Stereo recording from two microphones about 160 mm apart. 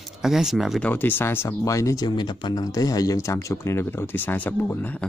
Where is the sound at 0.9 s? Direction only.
15° left (ahead or behind).